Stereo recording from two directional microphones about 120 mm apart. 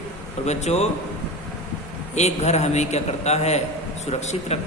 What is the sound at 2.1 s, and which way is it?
A man's voice, 70° left (ahead or behind).